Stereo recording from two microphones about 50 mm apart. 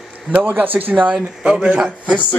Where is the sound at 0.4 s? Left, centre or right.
Right.